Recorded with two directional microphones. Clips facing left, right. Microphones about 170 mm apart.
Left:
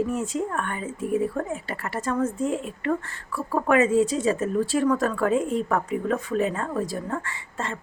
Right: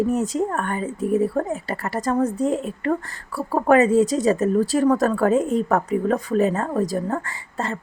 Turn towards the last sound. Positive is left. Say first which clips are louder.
# right 4 dB
turn(degrees=-40)  # may be behind; listen again after turning